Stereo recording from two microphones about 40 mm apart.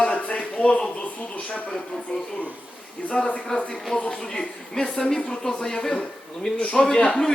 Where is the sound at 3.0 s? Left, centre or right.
Left; by 5.7 s centre.